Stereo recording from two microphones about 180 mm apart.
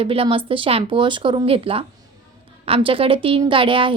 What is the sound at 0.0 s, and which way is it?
A woman's voice, 30° right (ahead or behind).